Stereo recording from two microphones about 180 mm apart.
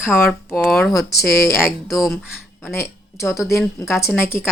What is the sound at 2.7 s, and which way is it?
Speech, 15° left (ahead or behind).